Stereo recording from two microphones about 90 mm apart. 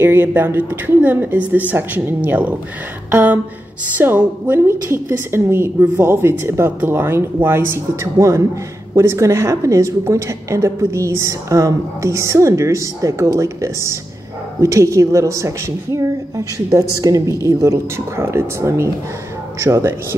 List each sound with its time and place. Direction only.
0.0 s a woman's voice: 20° right (ahead or behind)
3.1 s a sound: 25° right (ahead or behind)
4.0 s a woman's voice: 25° right (ahead or behind)